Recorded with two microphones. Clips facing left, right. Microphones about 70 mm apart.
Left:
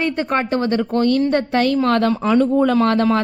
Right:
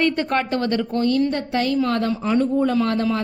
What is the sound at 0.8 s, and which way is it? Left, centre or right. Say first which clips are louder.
A woman's voice: left 3 dB; left.